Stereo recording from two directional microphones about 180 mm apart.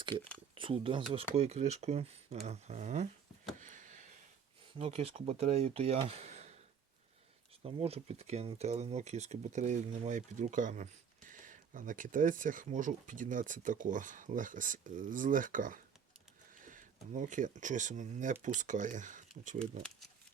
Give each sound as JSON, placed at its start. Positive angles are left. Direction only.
{"t": 0.5, "sound": "speech", "side_deg": -30}
{"t": 3.6, "sound": "a sound", "side_deg": -45}
{"t": 4.8, "sound": "speech", "side_deg": -35}
{"t": 7.6, "sound": "speech", "side_deg": -35}